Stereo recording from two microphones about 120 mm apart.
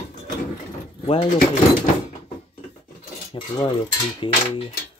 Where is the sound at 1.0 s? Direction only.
55° left (ahead or behind).